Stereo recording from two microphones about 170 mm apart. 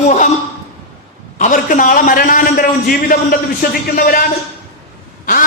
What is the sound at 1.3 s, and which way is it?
A man's voice, 50° left (ahead or behind).